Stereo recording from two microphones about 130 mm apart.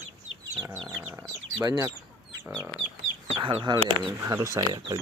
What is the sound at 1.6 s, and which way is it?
Speech, 25° right (ahead or behind).